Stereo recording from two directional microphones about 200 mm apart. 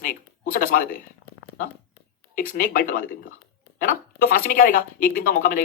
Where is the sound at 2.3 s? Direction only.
45° left (ahead or behind).